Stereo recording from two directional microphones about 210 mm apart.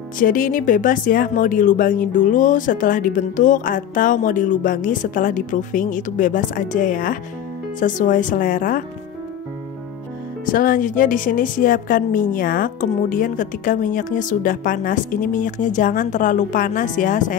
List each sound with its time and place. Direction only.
0.2 s a woman's voice: 40° left (ahead or behind)
10.4 s a woman's voice: 40° left (ahead or behind)